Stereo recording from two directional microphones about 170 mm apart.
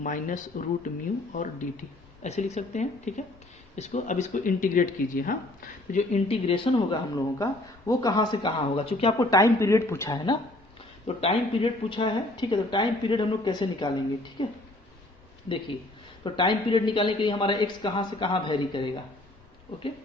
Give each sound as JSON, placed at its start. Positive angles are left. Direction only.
{"t": 0.0, "sound": "speech", "side_deg": 50}
{"t": 5.9, "sound": "speech", "side_deg": 40}
{"t": 9.1, "sound": "speech", "side_deg": 20}
{"t": 11.0, "sound": "speech", "side_deg": 35}
{"t": 16.2, "sound": "speech", "side_deg": 30}